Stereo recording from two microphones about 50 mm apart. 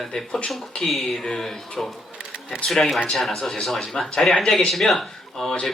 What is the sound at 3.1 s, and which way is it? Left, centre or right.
Speech, centre.